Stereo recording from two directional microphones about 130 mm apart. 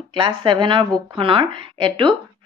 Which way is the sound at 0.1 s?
35° right (ahead or behind).